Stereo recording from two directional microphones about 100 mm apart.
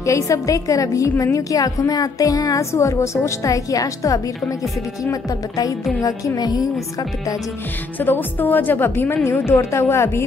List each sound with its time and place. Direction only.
0.0 s a woman's voice: 35° left (ahead or behind)
8.0 s a woman's voice: 20° left (ahead or behind)